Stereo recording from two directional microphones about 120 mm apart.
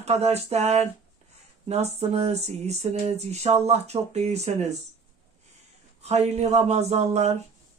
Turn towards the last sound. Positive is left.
turn(degrees=-65)  # may be behind; listen again after turning